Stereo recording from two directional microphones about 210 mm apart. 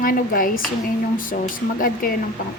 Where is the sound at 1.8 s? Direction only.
45° left (ahead or behind).